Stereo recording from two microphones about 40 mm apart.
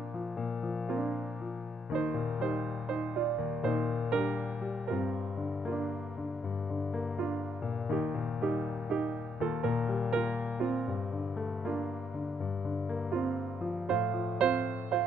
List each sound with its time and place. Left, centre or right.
0.7 s music: centre
7.0 s music: right
13.3 s music: centre
14.5 s music: right